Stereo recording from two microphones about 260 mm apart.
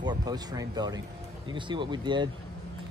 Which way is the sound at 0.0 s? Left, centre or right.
Centre.